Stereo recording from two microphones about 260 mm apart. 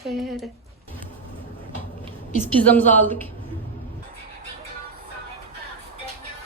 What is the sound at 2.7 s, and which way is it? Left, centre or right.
Speech, centre.